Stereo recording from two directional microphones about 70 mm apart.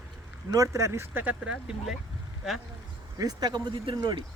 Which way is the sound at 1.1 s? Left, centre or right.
Right.